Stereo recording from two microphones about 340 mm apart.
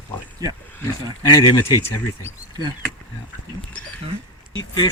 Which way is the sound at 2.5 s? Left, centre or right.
Centre.